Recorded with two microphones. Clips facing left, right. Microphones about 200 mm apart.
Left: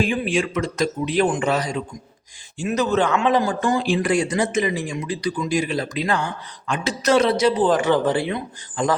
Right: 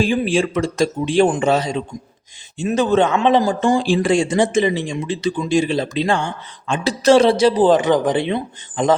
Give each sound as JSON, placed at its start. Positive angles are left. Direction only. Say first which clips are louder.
{"t": 0.0, "sound": "speech", "louder": "right 4 dB", "side_deg": -30}
{"t": 7.8, "sound": "speech", "louder": "right 2 dB", "side_deg": -15}